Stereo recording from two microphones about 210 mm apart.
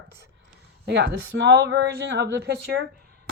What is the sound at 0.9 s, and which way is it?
Speech, 55° right (ahead or behind).